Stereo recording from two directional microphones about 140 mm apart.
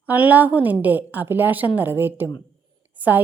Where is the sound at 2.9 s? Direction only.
10° right (ahead or behind).